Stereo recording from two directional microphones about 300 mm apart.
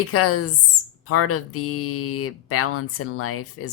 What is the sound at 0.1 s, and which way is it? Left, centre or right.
Speech, left.